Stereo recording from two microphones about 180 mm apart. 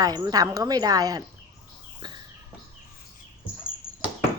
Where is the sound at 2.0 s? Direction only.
25° right (ahead or behind).